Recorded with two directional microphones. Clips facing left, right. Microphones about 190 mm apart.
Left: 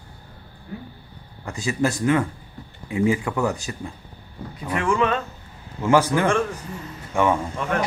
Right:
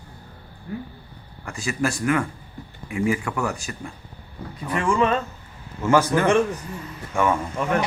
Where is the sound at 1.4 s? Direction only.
20° left (ahead or behind).